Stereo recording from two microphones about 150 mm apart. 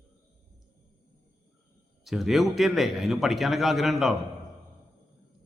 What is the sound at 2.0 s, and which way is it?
Speech, centre (ahead or behind).